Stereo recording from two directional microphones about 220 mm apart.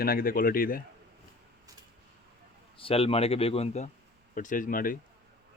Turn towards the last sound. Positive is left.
turn(degrees=40)  # may be behind; listen again after turning